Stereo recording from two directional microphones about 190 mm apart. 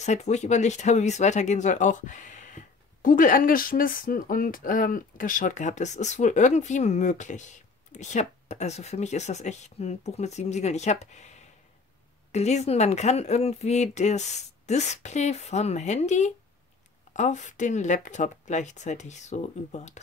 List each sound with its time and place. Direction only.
0.0 s speech: 40° left (ahead or behind)